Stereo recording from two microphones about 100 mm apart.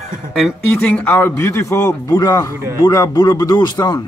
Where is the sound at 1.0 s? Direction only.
25° left (ahead or behind); by 4.0 s 45° left (ahead or behind).